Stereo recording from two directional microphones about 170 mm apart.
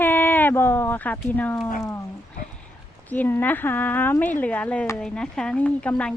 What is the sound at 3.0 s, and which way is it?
Speech, 10° left (ahead or behind).